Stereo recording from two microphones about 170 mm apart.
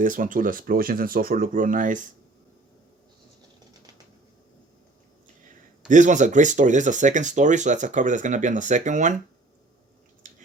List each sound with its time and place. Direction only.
0.0 s speech: 50° right (ahead or behind)
5.9 s speech: 45° right (ahead or behind)